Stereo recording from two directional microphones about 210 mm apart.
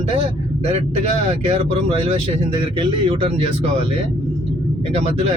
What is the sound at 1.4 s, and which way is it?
Speech, 30° right (ahead or behind).